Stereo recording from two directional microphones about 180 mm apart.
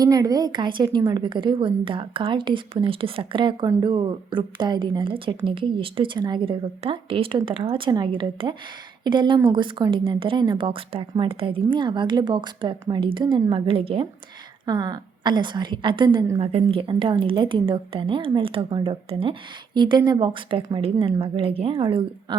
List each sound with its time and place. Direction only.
0.0 s a woman's voice: 20° right (ahead or behind)
16.4 s a woman's voice: 35° right (ahead or behind)